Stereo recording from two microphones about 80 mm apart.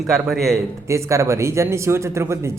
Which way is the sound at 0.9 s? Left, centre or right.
Right.